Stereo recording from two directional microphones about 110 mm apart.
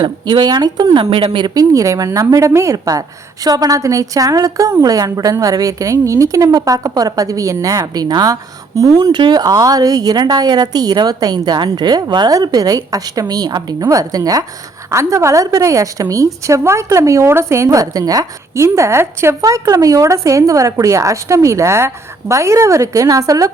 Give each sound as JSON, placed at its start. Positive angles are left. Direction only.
{"t": 0.0, "sound": "a woman's voice", "side_deg": -45}
{"t": 1.5, "sound": "a woman's voice", "side_deg": -35}
{"t": 18.6, "sound": "a woman's voice", "side_deg": -25}